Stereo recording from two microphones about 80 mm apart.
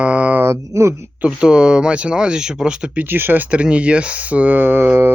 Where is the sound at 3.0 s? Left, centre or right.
Right.